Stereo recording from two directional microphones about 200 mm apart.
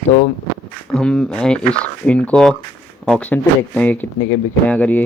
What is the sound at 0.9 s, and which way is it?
Speech, 5° left (ahead or behind).